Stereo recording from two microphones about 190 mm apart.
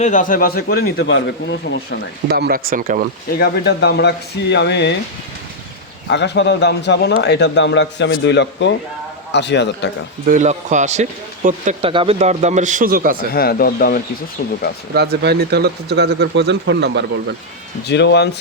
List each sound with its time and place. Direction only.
0.0 s a man's voice: 45° left (ahead or behind); by 2.0 s 65° left (ahead or behind)
2.3 s speech: 55° right (ahead or behind)
3.3 s speech: 55° left (ahead or behind)
6.1 s a man's voice: 65° left (ahead or behind)
10.2 s speech: 40° right (ahead or behind)
13.3 s a man's voice: 55° left (ahead or behind)
14.9 s speech: 55° right (ahead or behind)
17.8 s speech: 65° left (ahead or behind)